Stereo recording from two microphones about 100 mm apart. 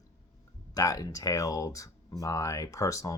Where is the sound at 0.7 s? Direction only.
35° left (ahead or behind).